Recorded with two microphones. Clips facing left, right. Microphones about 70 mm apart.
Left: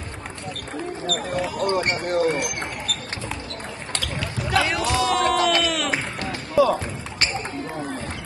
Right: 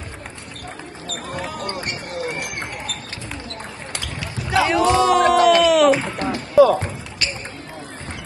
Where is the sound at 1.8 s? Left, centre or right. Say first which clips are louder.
Left 6 dB; left.